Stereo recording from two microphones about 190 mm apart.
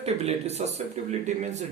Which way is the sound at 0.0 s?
35° right (ahead or behind).